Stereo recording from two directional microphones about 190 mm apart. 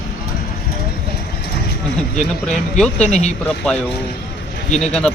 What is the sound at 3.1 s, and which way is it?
Speech, 35° left (ahead or behind).